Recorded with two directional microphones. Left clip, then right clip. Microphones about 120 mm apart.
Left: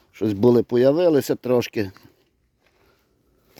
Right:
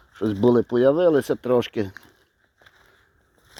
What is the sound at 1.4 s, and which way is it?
Speech, 60° left (ahead or behind).